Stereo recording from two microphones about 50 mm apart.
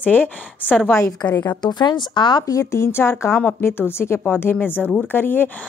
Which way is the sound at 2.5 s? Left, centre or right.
Left.